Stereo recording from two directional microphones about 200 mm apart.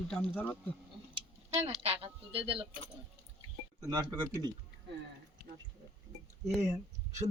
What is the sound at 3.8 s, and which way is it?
Speech, 15° right (ahead or behind).